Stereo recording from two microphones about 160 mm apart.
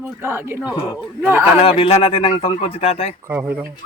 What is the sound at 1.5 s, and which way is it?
Speech, 35° left (ahead or behind).